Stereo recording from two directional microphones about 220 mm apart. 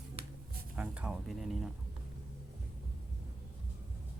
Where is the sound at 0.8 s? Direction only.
5° right (ahead or behind).